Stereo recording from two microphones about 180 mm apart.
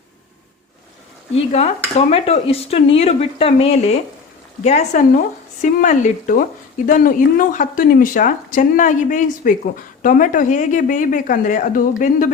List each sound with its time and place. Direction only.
1.4 s stir: 35° left (ahead or behind)
5.6 s speech: 45° left (ahead or behind)